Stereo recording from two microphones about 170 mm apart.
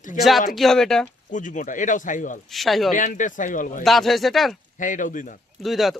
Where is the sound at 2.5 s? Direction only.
Centre (ahead or behind).